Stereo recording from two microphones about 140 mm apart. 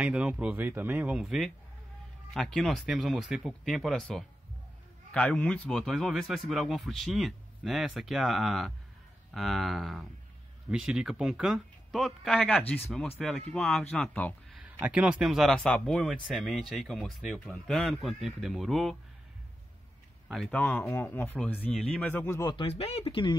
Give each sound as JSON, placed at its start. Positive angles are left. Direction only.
{"t": 0.0, "sound": "speech", "side_deg": -10}
{"t": 14.8, "sound": "speech", "side_deg": -5}
{"t": 20.2, "sound": "speech", "side_deg": 5}
{"t": 22.7, "sound": "speech", "side_deg": 45}